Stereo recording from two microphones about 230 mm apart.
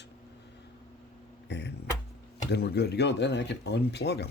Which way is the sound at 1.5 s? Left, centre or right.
Left.